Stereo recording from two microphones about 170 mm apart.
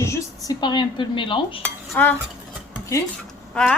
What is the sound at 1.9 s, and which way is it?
Cutlery, 10° left (ahead or behind).